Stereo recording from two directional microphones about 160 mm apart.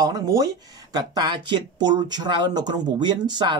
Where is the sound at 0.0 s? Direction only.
25° right (ahead or behind).